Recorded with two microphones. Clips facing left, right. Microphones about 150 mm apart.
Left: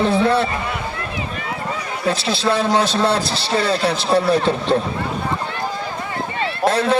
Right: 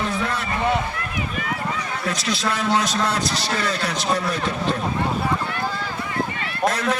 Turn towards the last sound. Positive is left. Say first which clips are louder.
# left 4 dB
turn(degrees=30)  # may be behind; listen again after turning